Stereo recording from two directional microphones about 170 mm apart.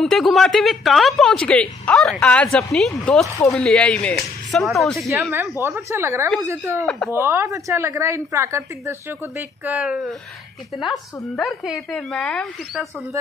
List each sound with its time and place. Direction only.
0.0 s a woman's voice: centre (ahead or behind)
5.6 s a woman's voice: 15° right (ahead or behind); by 12.8 s 5° left (ahead or behind)